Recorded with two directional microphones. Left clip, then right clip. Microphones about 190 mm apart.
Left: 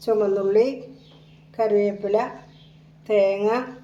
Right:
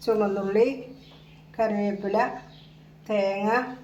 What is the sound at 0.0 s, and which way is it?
A woman's voice, 25° left (ahead or behind).